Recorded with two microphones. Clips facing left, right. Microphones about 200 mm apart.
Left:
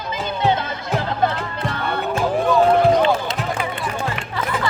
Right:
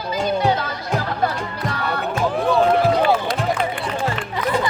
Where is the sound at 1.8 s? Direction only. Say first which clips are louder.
Left 1 dB; centre (ahead or behind).